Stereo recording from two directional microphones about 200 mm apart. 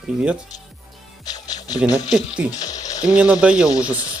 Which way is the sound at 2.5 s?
20° left (ahead or behind).